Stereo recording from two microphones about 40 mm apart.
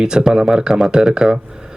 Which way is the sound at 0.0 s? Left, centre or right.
Centre.